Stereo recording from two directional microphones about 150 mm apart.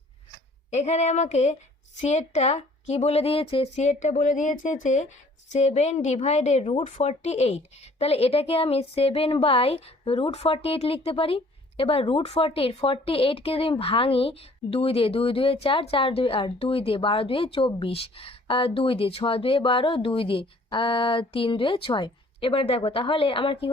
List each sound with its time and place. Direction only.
0.7 s a woman's voice: 50° left (ahead or behind)